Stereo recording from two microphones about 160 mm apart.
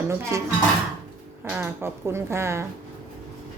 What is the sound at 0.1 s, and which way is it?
Speech, 15° right (ahead or behind).